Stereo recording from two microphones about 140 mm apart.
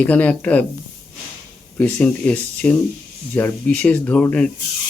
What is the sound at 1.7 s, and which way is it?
Speech, 10° left (ahead or behind).